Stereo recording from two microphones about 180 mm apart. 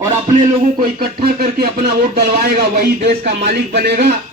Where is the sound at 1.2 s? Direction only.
60° right (ahead or behind).